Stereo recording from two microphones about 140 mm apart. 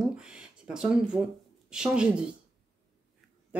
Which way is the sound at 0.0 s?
5° right (ahead or behind).